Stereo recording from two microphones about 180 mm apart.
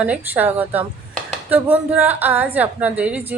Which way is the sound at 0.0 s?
10° right (ahead or behind).